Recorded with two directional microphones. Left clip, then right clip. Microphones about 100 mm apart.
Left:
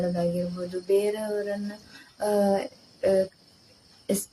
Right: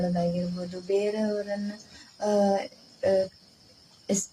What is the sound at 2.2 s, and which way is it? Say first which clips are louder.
Speech: even; 30° left (ahead or behind).